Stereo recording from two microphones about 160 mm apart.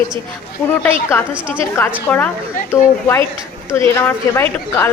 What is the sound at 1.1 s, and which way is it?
Speech, 15° left (ahead or behind).